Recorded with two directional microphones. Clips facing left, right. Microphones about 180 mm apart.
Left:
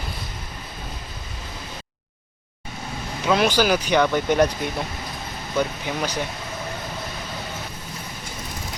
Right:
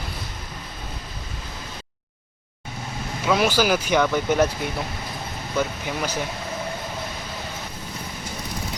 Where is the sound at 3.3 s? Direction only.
5° right (ahead or behind).